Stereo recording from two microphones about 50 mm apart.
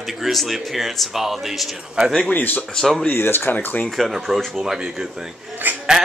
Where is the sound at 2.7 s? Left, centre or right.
Centre.